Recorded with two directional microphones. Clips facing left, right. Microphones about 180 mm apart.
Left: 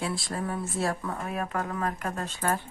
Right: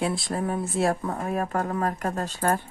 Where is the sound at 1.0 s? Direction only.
40° right (ahead or behind).